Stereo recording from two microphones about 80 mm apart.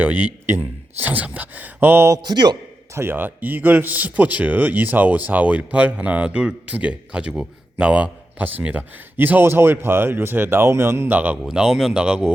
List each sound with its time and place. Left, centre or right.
0.0 s a man's voice: right
2.2 s a man's voice: right
2.9 s a man's voice: right
11.1 s a man's voice: right
11.4 s speech: centre